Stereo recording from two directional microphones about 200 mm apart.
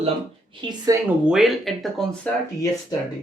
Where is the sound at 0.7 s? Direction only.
15° right (ahead or behind).